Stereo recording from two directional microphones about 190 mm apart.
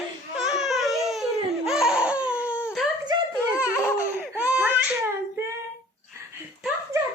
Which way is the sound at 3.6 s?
15° left (ahead or behind).